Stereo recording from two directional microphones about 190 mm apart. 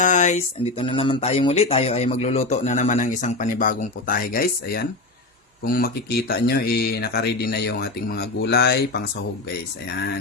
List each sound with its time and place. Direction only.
0.0 s speech: 40° left (ahead or behind); by 9.0 s 60° left (ahead or behind)